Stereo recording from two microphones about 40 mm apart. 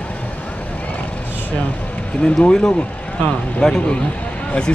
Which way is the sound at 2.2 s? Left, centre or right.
Centre.